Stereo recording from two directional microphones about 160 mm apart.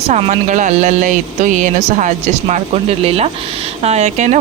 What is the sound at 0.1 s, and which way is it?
Speech, 45° right (ahead or behind).